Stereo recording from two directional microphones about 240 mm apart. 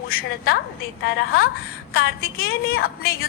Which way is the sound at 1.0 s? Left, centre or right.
Left.